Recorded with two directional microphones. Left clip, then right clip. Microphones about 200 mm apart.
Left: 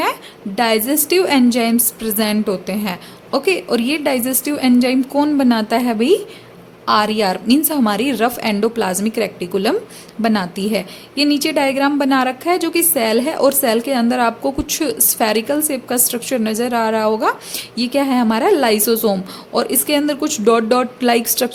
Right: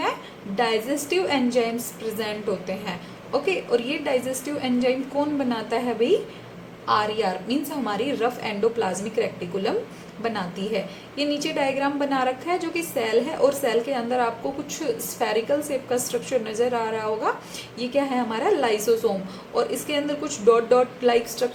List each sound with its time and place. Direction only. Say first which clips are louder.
0.0 s a woman's voice: left 7 dB; 55° left (ahead or behind)